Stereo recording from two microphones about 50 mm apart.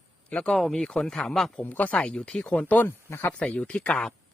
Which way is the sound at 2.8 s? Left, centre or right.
Left.